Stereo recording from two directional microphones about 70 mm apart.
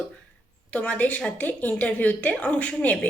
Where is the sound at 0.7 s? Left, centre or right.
Centre.